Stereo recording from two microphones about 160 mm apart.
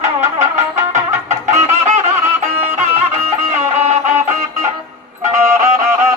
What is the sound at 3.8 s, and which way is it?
Music, 50° right (ahead or behind).